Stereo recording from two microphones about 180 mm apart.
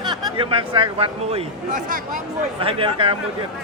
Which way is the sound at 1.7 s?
45° right (ahead or behind).